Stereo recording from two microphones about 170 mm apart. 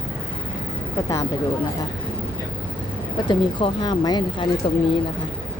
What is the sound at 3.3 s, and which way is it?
A woman's voice, 25° left (ahead or behind).